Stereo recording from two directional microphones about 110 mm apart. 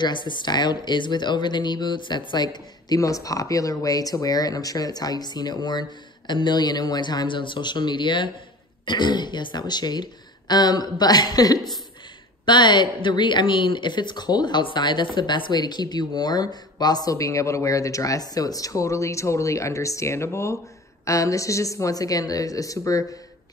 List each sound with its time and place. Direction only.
0.0 s speech: 45° left (ahead or behind)